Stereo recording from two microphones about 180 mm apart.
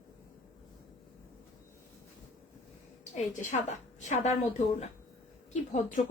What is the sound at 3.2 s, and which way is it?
A woman's voice, 40° left (ahead or behind).